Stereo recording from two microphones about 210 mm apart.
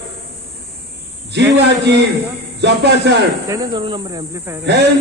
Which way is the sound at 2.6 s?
55° right (ahead or behind).